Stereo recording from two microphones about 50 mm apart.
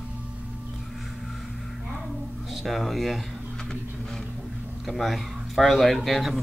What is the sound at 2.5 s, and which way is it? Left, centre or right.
Speech, centre.